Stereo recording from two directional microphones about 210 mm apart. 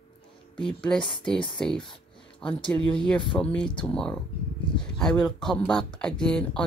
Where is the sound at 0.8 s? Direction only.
5° left (ahead or behind).